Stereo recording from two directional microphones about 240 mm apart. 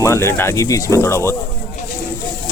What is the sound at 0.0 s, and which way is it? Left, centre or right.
Speech, centre.